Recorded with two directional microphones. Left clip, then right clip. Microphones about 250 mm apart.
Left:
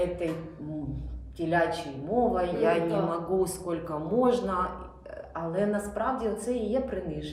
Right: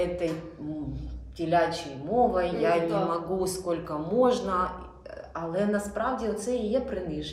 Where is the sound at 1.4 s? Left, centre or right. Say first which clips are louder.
Right 2 dB; centre.